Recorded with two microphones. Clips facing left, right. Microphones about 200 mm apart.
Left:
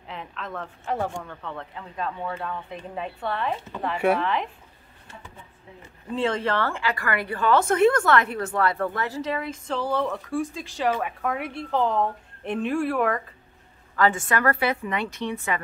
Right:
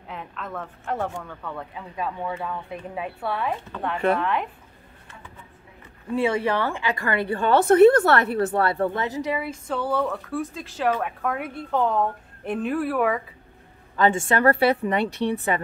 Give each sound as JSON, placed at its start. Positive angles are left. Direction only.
{"t": 0.1, "sound": "a woman's voice", "side_deg": 0}
{"t": 6.1, "sound": "a woman's voice", "side_deg": -10}
{"t": 13.9, "sound": "a woman's voice", "side_deg": -25}